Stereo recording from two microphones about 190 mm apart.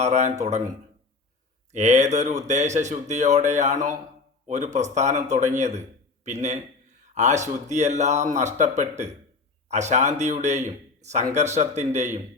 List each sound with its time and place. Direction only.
0.0 s speech: 35° right (ahead or behind)
1.7 s speech: 35° right (ahead or behind)